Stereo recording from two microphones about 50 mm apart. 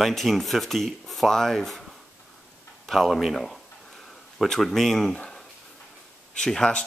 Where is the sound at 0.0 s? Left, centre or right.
Centre.